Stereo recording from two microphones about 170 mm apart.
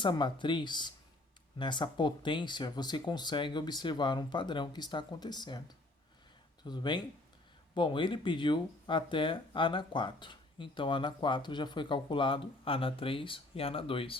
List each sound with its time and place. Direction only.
0.0 s speech: 25° left (ahead or behind)
6.7 s speech: 25° left (ahead or behind)